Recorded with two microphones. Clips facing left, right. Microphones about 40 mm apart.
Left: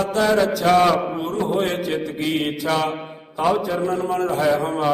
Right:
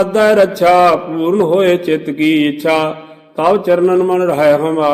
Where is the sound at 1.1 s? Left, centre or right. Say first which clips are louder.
Right 10 dB; right.